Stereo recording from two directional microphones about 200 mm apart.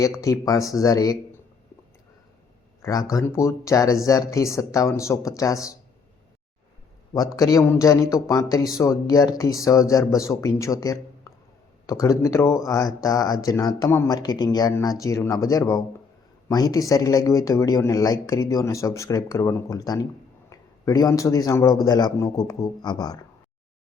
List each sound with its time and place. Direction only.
0.0 s speech: 15° left (ahead or behind)
2.8 s speech: 15° left (ahead or behind)
7.3 s a man's voice: 15° left (ahead or behind)